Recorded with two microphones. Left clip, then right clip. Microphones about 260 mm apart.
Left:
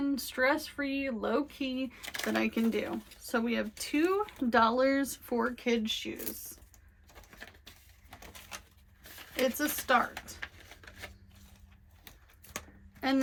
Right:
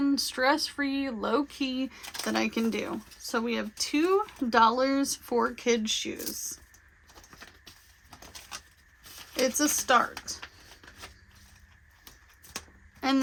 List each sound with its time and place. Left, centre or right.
0.0 s speech: centre
9.4 s speech: right
13.0 s speech: centre